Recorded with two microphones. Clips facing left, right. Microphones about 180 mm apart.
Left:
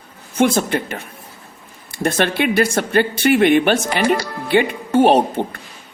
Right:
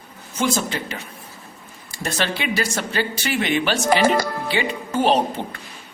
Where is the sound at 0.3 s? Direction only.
55° left (ahead or behind).